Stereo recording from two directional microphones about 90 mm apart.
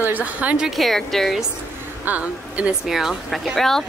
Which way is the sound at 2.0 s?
15° right (ahead or behind).